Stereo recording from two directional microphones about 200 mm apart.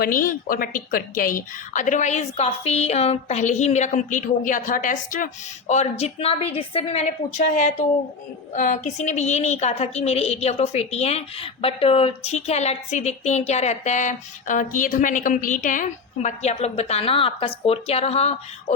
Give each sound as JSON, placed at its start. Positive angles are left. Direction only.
{"t": 0.0, "sound": "a woman's voice", "side_deg": 45}